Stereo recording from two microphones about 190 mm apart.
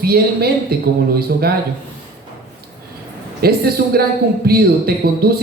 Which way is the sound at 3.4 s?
55° right (ahead or behind).